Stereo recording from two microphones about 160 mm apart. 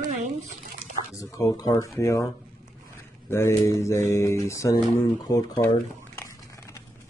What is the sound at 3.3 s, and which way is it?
Speech, 15° left (ahead or behind).